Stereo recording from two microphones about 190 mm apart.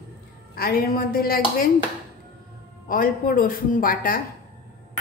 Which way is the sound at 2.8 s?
50° left (ahead or behind).